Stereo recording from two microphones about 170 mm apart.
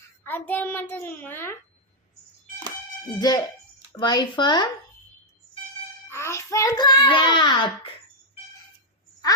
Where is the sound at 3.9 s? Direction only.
25° left (ahead or behind).